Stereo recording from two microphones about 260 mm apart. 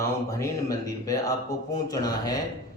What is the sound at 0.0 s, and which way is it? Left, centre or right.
Speech, centre.